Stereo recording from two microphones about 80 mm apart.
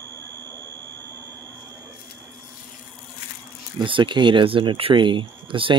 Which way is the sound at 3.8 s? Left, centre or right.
Right.